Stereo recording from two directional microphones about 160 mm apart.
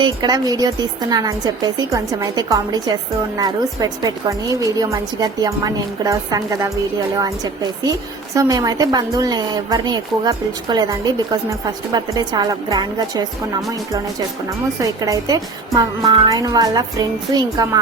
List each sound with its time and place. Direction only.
0.0 s a woman's voice: 25° right (ahead or behind)
14.8 s a woman's voice: 20° right (ahead or behind)